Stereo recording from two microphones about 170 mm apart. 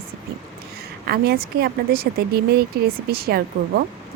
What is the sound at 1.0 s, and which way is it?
A woman's voice, 65° right (ahead or behind).